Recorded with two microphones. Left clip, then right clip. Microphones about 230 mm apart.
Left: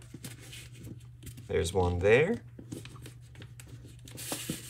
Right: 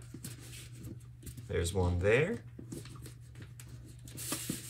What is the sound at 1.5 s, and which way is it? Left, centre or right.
Speech, left.